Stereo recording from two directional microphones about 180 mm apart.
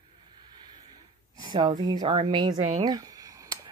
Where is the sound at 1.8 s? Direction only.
25° right (ahead or behind).